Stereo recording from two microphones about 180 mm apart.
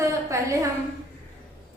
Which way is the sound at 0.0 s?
20° right (ahead or behind).